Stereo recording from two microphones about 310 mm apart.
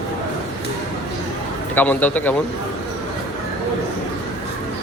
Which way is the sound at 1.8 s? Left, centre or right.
Centre.